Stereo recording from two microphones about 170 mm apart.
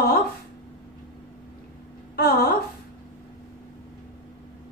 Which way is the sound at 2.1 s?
65° left (ahead or behind).